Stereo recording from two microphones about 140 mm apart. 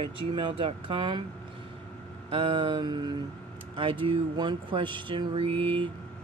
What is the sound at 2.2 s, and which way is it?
Speech, 40° right (ahead or behind).